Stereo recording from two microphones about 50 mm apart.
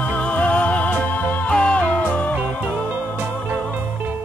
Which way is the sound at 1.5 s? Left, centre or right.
Left.